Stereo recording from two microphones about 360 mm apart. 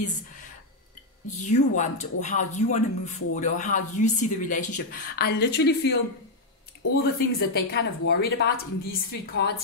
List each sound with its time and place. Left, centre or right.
1.4 s speech: centre